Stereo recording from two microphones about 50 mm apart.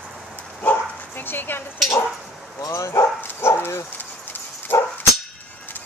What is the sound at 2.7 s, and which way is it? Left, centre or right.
Speech, left.